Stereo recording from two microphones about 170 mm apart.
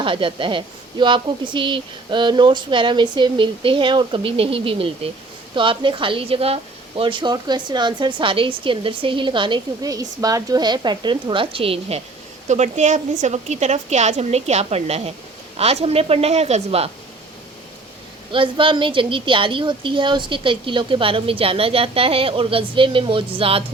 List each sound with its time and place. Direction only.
0.0 s a woman's voice: 30° right (ahead or behind)
18.3 s a woman's voice: 30° right (ahead or behind)